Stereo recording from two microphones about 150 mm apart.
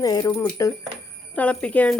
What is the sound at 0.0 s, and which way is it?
Speech, 25° left (ahead or behind).